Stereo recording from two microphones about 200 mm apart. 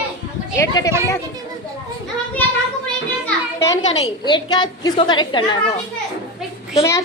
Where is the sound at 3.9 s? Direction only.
20° left (ahead or behind).